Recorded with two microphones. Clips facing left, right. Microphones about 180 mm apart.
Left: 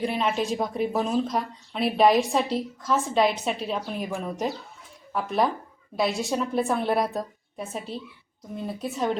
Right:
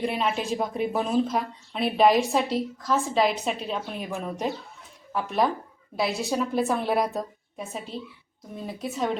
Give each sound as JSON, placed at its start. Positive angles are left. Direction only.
{"t": 0.0, "sound": "a woman's voice", "side_deg": 0}